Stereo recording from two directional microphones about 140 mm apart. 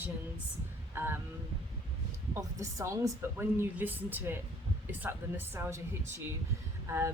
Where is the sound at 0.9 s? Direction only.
15° right (ahead or behind).